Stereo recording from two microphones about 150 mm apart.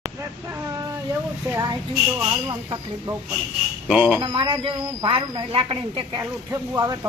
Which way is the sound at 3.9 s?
10° right (ahead or behind).